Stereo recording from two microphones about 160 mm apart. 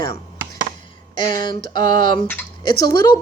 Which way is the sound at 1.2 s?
25° left (ahead or behind).